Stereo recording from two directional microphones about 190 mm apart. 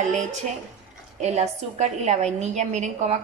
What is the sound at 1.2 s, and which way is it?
A woman's voice, 35° right (ahead or behind).